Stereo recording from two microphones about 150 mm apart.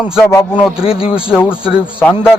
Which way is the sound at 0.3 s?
20° left (ahead or behind).